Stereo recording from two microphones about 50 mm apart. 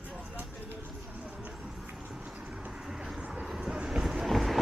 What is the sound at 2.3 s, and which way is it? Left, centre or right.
Vehicle, centre.